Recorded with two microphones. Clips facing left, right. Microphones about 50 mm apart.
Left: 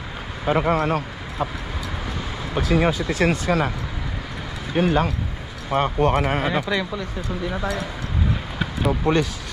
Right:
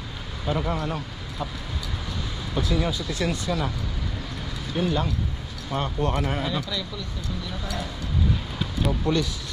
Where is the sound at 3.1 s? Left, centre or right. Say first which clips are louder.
Left 6 dB; left.